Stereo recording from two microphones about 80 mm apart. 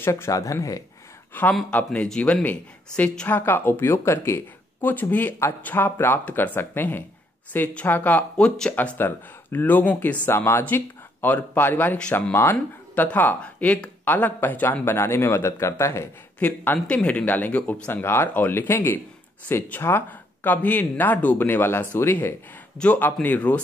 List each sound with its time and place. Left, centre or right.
0.0 s speech: left
0.3 s speech: left
1.3 s speech: left
2.0 s speech: centre
8.7 s speech: left
16.3 s speech: left